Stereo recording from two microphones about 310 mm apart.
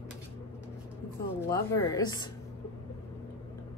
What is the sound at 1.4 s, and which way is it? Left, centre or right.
Speech, centre.